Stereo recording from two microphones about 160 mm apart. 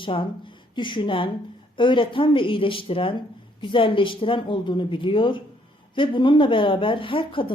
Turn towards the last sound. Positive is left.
turn(degrees=35)  # may be behind; listen again after turning